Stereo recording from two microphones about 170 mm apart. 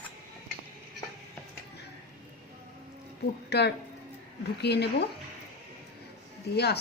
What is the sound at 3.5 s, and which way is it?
A woman's voice, 75° left (ahead or behind).